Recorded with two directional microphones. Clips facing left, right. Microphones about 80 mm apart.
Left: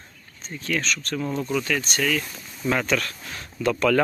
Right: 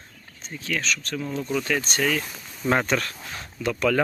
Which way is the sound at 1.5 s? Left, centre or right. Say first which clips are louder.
Right 1 dB; centre.